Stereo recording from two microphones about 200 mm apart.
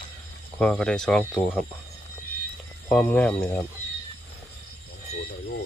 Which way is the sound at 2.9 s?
5° left (ahead or behind).